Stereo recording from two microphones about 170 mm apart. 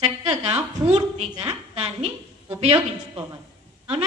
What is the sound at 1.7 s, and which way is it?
Speech, 35° right (ahead or behind).